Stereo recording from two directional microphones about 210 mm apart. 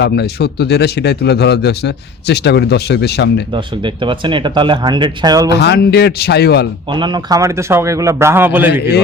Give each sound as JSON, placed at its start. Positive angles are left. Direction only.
{"t": 0.0, "sound": "a man's voice", "side_deg": 50}
{"t": 3.5, "sound": "speech", "side_deg": -20}
{"t": 5.5, "sound": "a man's voice", "side_deg": 50}
{"t": 6.9, "sound": "a man's voice", "side_deg": -20}